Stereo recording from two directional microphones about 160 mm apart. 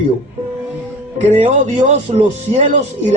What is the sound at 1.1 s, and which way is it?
A man's voice, 50° right (ahead or behind).